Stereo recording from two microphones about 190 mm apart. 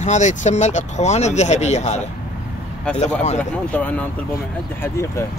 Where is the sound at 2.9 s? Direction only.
5° left (ahead or behind).